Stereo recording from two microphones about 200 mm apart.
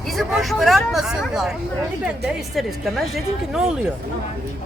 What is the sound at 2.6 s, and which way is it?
Speech, centre (ahead or behind).